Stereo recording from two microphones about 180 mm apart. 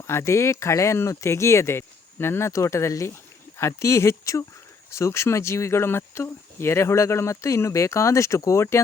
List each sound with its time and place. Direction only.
0.1 s speech: 15° left (ahead or behind)